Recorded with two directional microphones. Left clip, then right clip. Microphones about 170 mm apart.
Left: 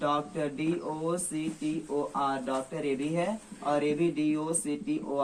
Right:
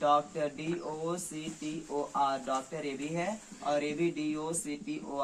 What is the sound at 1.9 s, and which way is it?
Speech, 15° right (ahead or behind).